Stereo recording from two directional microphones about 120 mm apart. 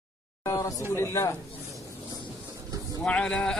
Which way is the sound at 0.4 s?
25° left (ahead or behind).